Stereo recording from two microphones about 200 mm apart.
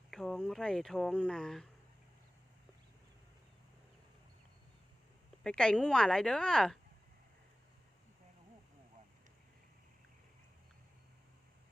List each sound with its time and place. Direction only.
0.1 s speech: centre (ahead or behind)
5.4 s speech: 5° left (ahead or behind)